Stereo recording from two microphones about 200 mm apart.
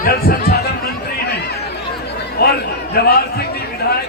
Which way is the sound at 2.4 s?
50° left (ahead or behind).